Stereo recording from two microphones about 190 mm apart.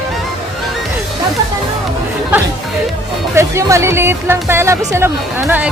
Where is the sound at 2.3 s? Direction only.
10° right (ahead or behind).